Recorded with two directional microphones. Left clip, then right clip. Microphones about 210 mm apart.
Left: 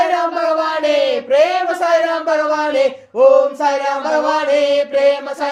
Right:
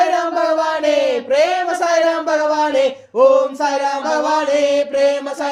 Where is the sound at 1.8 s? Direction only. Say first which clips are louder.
Even; 15° right (ahead or behind).